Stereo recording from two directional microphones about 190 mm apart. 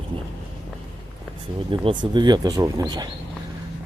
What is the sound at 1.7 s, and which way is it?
Speech, 25° right (ahead or behind).